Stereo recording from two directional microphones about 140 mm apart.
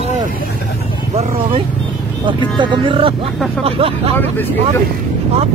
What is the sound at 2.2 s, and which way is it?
Speech, 35° right (ahead or behind).